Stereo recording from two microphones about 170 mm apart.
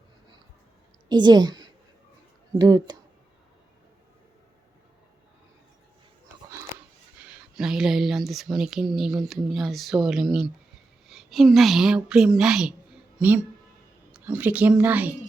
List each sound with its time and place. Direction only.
1.0 s a woman's voice: 25° right (ahead or behind)
7.2 s a woman's voice: 5° right (ahead or behind)